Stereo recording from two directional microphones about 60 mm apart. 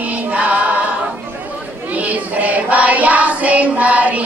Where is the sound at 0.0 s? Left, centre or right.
Right.